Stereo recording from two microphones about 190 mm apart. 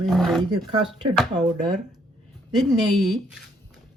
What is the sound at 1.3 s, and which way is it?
Speech, 20° right (ahead or behind).